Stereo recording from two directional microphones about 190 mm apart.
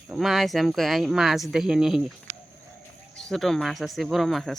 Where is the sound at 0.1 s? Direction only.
Centre (ahead or behind).